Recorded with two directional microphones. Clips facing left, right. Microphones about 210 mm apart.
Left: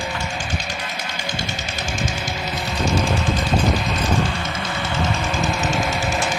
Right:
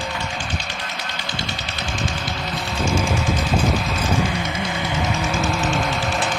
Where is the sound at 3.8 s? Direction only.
10° right (ahead or behind).